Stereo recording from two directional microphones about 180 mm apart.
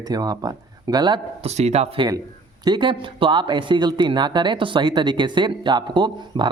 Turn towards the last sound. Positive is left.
turn(degrees=-25)  # may be behind; listen again after turning